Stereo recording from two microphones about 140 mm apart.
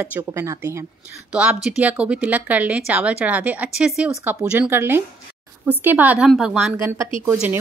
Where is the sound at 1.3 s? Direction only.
5° right (ahead or behind).